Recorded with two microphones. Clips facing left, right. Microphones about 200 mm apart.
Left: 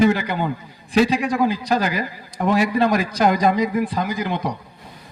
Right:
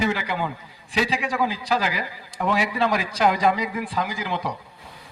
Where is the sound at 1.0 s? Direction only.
45° left (ahead or behind).